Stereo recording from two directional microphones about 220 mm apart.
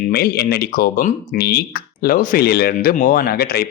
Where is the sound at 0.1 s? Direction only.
45° left (ahead or behind).